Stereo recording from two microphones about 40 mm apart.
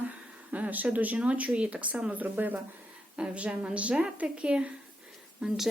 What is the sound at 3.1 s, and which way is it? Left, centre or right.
A woman's voice, right.